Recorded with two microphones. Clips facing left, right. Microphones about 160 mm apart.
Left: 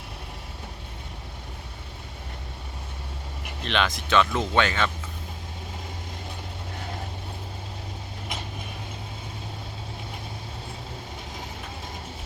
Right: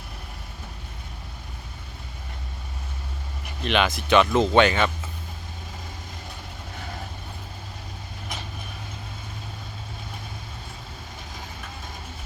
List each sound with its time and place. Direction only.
3.6 s speech: 5° right (ahead or behind)
4.2 s speech: 20° right (ahead or behind)